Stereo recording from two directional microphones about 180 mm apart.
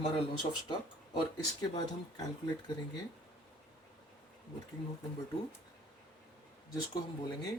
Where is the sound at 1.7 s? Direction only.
25° left (ahead or behind).